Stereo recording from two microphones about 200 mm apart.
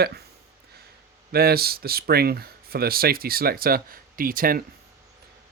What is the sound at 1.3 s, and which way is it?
Speech, 50° right (ahead or behind).